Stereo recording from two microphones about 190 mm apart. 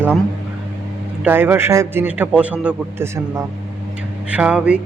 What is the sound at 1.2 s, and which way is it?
A man's voice, 10° right (ahead or behind).